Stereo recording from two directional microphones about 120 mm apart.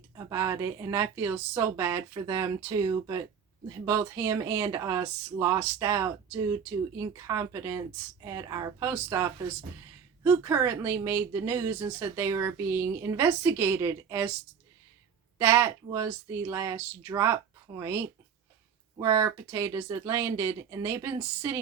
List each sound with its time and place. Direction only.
0.2 s speech: 25° right (ahead or behind)
15.4 s speech: 20° right (ahead or behind)